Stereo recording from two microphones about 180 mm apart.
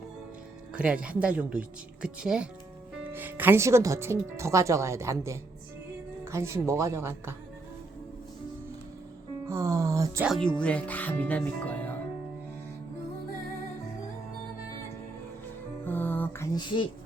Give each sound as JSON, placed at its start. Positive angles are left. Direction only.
{"t": 0.7, "sound": "speech", "side_deg": -5}
{"t": 9.5, "sound": "speech", "side_deg": -15}
{"t": 10.2, "sound": "speech", "side_deg": 0}
{"t": 15.8, "sound": "music", "side_deg": 10}
{"t": 16.6, "sound": "speech", "side_deg": 25}